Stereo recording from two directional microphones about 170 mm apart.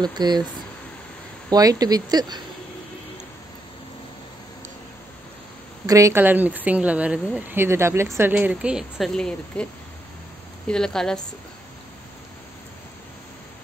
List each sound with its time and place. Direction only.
0.0 s speech: 25° right (ahead or behind)
1.5 s speech: 20° right (ahead or behind)
5.9 s a woman's voice: 20° right (ahead or behind); by 9.7 s 5° left (ahead or behind)
10.7 s a woman's voice: 5° left (ahead or behind)